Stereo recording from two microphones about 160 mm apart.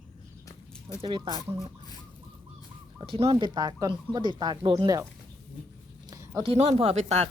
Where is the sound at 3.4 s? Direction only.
25° right (ahead or behind).